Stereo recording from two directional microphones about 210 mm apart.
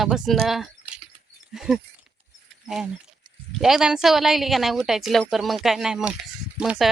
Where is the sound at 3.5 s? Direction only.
Centre (ahead or behind).